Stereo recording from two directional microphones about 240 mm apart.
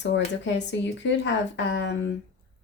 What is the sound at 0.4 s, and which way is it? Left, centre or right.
Speech, left.